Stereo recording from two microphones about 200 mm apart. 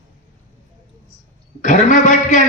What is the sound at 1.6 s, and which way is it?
Speech, 40° left (ahead or behind).